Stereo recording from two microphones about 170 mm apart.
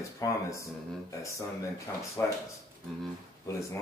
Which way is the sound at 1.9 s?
15° left (ahead or behind).